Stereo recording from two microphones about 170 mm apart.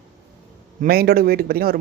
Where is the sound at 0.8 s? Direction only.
60° right (ahead or behind).